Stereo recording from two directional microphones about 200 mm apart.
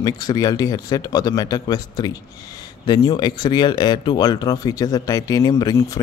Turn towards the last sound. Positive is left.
turn(degrees=15)  # may be behind; listen again after turning